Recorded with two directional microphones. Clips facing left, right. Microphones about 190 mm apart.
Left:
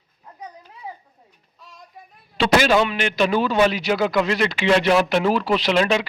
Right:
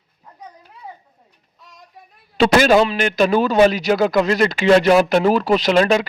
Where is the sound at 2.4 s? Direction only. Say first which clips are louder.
Right 4 dB; 45° right (ahead or behind).